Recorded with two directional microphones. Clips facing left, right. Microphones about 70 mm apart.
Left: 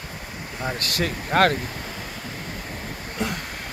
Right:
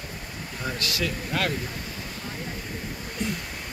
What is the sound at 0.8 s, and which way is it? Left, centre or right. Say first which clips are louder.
Speech: left 2 dB; left.